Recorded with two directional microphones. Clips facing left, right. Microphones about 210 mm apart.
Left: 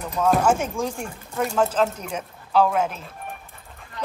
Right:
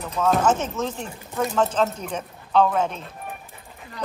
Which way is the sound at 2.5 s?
10° left (ahead or behind).